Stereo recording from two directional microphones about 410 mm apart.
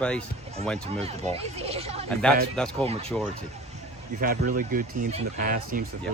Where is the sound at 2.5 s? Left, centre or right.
Centre.